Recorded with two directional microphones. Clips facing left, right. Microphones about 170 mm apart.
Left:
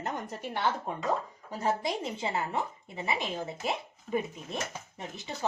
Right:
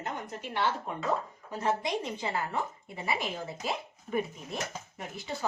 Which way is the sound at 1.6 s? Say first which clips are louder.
Even; 30° left (ahead or behind).